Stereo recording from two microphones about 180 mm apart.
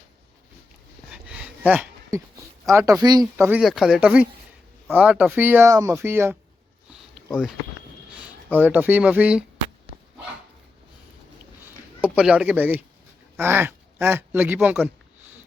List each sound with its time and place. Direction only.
1.1 s a sound: 5° right (ahead or behind)
2.6 s speech: 15° right (ahead or behind)
3.6 s speech: centre (ahead or behind)
8.5 s speech: 10° right (ahead or behind)
12.0 s speech: 5° right (ahead or behind)